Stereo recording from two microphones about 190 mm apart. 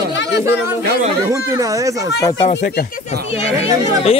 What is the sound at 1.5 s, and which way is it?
Speech, 15° right (ahead or behind).